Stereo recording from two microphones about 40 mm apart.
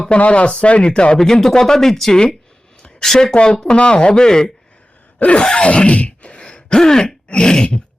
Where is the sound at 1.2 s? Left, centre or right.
Centre.